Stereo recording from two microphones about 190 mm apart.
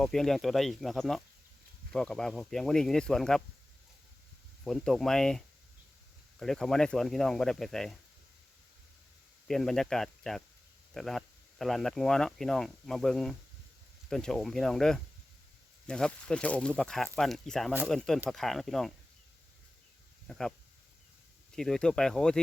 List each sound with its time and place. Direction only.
0.0 s speech: centre (ahead or behind)
4.6 s speech: centre (ahead or behind)
6.4 s speech: centre (ahead or behind)
9.5 s speech: centre (ahead or behind)
20.2 s speech: 5° left (ahead or behind)
21.5 s speech: 5° left (ahead or behind)